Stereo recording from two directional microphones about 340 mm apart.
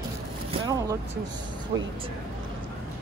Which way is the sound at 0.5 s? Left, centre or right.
Centre.